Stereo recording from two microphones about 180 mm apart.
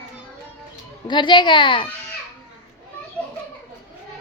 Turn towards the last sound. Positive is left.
turn(degrees=5)  # may be behind; listen again after turning